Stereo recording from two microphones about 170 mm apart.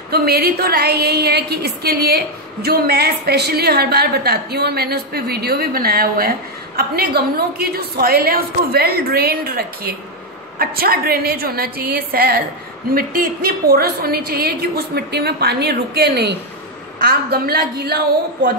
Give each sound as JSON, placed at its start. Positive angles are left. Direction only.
{"t": 0.1, "sound": "a woman's voice", "side_deg": -65}